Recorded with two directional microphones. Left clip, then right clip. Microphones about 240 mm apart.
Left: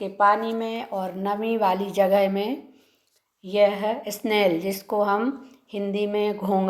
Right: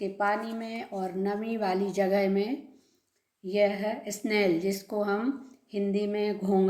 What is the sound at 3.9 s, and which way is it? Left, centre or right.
Speech, centre.